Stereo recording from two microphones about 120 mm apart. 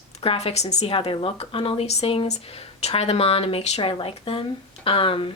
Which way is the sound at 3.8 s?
45° left (ahead or behind).